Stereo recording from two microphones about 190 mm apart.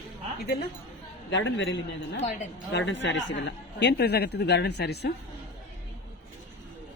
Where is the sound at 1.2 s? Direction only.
75° left (ahead or behind).